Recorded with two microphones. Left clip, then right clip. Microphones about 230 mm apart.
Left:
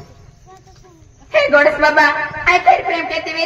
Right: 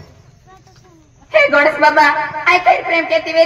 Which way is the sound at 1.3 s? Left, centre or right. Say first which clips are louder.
Right 1 dB; right.